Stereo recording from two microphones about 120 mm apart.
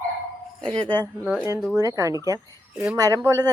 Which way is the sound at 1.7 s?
25° right (ahead or behind).